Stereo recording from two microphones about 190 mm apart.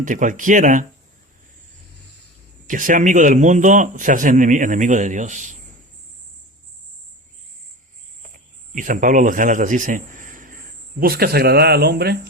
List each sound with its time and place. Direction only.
0.0 s speech: 40° right (ahead or behind)
2.6 s speech: 45° right (ahead or behind)
8.7 s a man's voice: 45° right (ahead or behind)